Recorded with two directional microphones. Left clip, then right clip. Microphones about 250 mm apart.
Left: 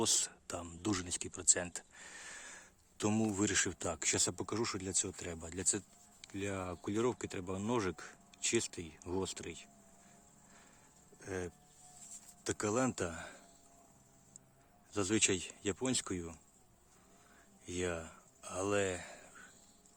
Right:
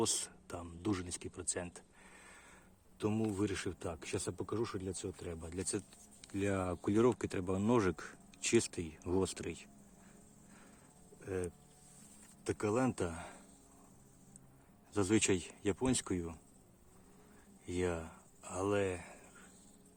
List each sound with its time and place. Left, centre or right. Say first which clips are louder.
0.0 s speech: left 2 dB; centre
6.2 s speech: right 4 dB; centre
11.2 s speech: right 2 dB; centre
14.9 s speech: right 1 dB; centre
17.7 s speech: right 1 dB; centre